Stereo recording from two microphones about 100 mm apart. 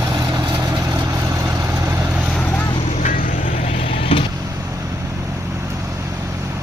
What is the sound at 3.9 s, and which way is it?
Vehicle, 70° left (ahead or behind).